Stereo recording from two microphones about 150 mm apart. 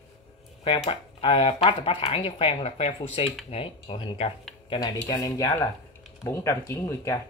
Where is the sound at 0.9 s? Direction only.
40° left (ahead or behind); by 7.2 s 20° left (ahead or behind).